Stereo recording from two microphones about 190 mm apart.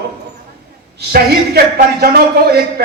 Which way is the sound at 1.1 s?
55° right (ahead or behind).